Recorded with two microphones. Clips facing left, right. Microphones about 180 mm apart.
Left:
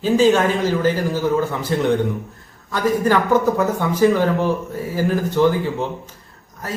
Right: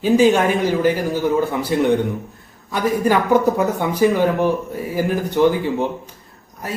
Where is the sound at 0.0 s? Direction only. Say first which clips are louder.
Right 1 dB; 15° right (ahead or behind).